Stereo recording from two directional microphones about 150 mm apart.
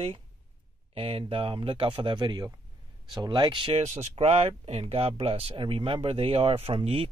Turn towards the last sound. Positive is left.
turn(degrees=-35)  # may be behind; listen again after turning